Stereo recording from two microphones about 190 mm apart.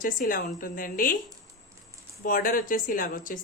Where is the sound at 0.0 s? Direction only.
45° left (ahead or behind).